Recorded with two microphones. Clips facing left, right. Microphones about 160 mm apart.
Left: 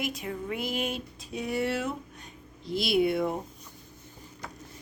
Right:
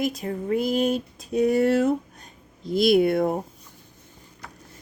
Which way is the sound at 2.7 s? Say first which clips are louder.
Right 7 dB; 50° right (ahead or behind).